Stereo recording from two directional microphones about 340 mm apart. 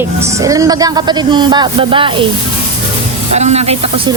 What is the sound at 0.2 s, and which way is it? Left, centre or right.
Speech, centre.